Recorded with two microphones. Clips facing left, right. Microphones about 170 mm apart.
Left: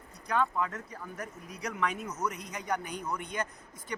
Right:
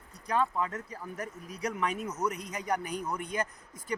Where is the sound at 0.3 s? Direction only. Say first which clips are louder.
Even; 30° right (ahead or behind).